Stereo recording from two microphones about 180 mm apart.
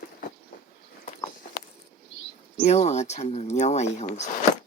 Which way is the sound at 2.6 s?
40° left (ahead or behind).